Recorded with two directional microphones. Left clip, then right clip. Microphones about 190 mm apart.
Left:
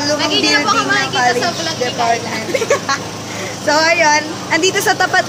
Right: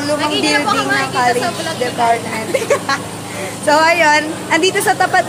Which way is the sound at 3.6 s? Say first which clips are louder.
Right 2 dB; 10° right (ahead or behind).